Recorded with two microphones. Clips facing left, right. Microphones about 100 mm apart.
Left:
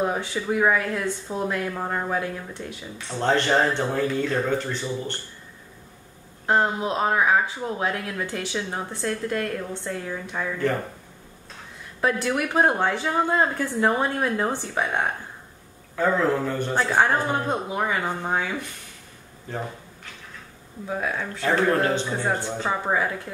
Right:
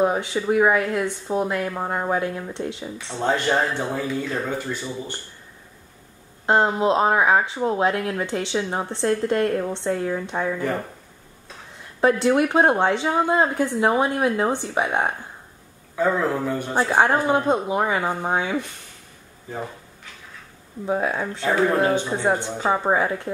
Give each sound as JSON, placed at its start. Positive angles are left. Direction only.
{"t": 0.0, "sound": "speech", "side_deg": -20}
{"t": 3.2, "sound": "speech", "side_deg": -5}
{"t": 6.4, "sound": "speech", "side_deg": -25}
{"t": 12.0, "sound": "speech", "side_deg": -25}
{"t": 20.8, "sound": "speech", "side_deg": -25}